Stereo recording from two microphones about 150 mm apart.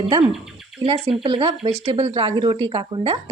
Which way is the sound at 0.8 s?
40° right (ahead or behind).